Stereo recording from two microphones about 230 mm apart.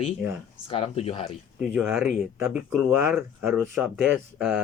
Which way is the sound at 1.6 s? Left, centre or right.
Centre.